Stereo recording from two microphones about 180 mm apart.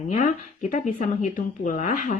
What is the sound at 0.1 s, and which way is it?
A woman's voice, 40° left (ahead or behind).